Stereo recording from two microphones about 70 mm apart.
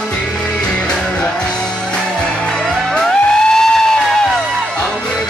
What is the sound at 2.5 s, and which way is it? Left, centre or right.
Music, centre.